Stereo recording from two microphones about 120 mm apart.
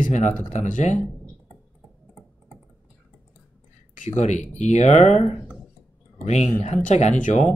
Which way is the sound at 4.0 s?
75° left (ahead or behind).